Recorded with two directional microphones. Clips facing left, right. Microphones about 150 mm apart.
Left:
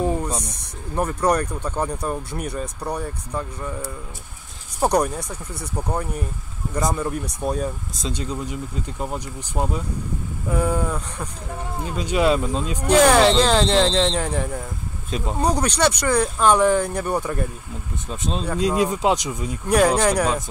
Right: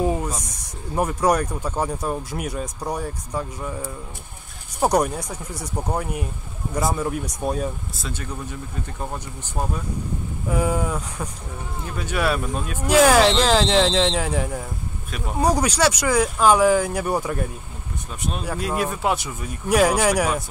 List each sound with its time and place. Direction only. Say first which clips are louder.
0.0 s a sound: even; 10° right (ahead or behind)
0.3 s speech: left 3 dB; 30° left (ahead or behind)
0.9 s speech: even; 10° right (ahead or behind)
4.8 s speech: even; 10° right (ahead or behind)
7.9 s speech: left 4 dB; 20° left (ahead or behind)
10.5 s speech: even; 10° right (ahead or behind)
11.8 s speech: left 4 dB; 15° left (ahead or behind)
12.8 s speech: even; 5° right (ahead or behind)
15.0 s speech: left 5 dB; 25° left (ahead or behind)
15.3 s speech: right 2 dB; 10° right (ahead or behind)
18.6 s speech: left 5 dB; 20° left (ahead or behind)
19.7 s speech: even; 5° right (ahead or behind)